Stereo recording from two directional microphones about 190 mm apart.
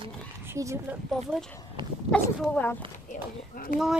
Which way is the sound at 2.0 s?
5° left (ahead or behind).